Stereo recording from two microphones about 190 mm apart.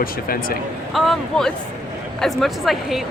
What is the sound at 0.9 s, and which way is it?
Speech, centre (ahead or behind).